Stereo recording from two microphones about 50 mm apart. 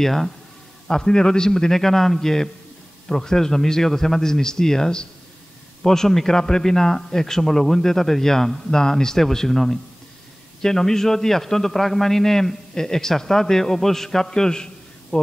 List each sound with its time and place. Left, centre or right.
0.0 s a man's voice: centre